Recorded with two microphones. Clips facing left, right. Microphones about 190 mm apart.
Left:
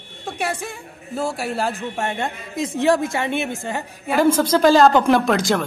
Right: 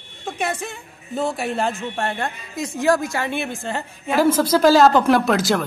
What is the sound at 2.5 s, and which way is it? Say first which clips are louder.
A woman's voice: left 1 dB; 25° left (ahead or behind).